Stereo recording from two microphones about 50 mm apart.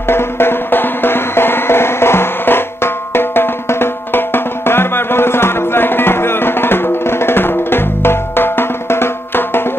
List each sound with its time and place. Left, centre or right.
0.1 s music: left